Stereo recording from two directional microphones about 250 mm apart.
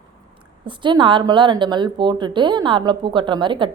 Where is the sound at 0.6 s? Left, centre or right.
Centre.